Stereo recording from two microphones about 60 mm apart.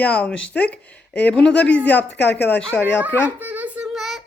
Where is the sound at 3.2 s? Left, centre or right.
Right.